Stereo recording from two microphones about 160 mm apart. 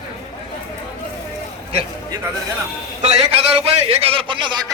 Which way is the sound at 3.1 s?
35° right (ahead or behind).